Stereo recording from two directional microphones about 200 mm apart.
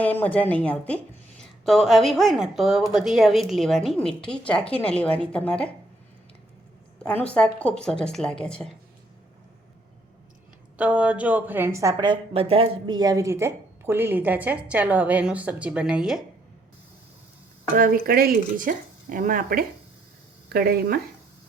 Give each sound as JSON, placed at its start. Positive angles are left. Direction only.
{"t": 0.0, "sound": "a woman's voice", "side_deg": 10}
{"t": 7.0, "sound": "a woman's voice", "side_deg": 5}
{"t": 10.8, "sound": "a woman's voice", "side_deg": -5}
{"t": 17.7, "sound": "speech", "side_deg": -45}